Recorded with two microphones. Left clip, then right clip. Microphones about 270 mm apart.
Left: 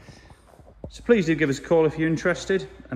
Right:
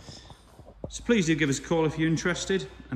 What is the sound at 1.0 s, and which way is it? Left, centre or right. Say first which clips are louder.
Speech: left 5 dB; centre.